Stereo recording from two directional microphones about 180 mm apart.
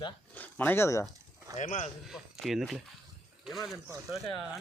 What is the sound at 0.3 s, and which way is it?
Speech, 10° left (ahead or behind).